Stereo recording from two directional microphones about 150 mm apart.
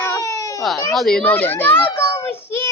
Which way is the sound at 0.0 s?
20° left (ahead or behind).